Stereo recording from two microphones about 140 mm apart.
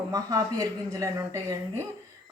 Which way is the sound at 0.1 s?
25° right (ahead or behind).